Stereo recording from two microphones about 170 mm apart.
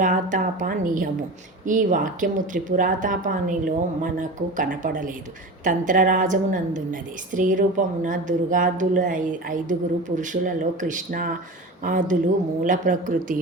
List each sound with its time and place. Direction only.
0.0 s a woman's voice: 50° right (ahead or behind)